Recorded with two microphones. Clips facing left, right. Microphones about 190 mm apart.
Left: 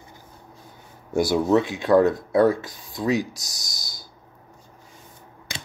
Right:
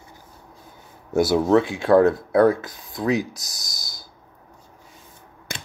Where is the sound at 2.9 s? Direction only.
Centre (ahead or behind).